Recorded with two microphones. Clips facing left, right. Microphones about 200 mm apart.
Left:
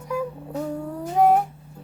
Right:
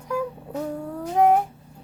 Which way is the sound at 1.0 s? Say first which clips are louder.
Even; 5° left (ahead or behind).